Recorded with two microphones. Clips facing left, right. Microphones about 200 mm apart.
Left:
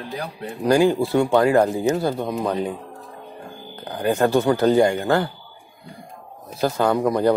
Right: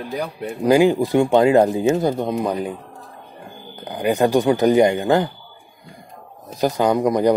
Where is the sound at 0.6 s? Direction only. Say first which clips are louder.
Right 2 dB; 15° right (ahead or behind).